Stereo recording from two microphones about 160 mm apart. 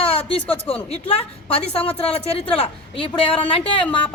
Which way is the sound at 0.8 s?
40° left (ahead or behind).